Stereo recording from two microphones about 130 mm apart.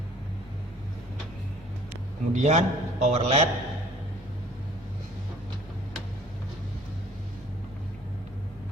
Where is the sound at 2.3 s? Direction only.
65° right (ahead or behind).